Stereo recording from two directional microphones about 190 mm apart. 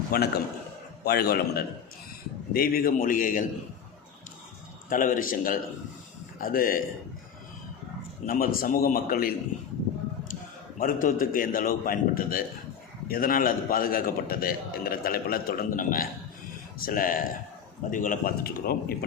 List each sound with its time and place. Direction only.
0.1 s a man's voice: 55° left (ahead or behind)
4.9 s a man's voice: 45° left (ahead or behind)
8.3 s a man's voice: 50° left (ahead or behind)
10.8 s a man's voice: 45° left (ahead or behind)